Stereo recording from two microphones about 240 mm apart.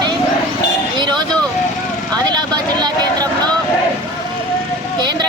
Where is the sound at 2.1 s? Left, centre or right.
Centre.